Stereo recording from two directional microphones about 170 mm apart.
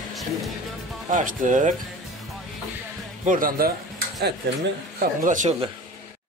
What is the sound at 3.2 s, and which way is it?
Speech, 55° right (ahead or behind).